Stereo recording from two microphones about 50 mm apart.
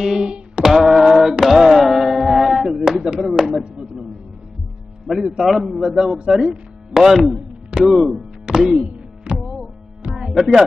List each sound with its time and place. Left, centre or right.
0.0 s a sound: centre
0.3 s music: centre
3.2 s a sound: centre
3.7 s music: centre
5.0 s a man's voice: centre
8.5 s music: centre
8.8 s music: right
10.0 s music: centre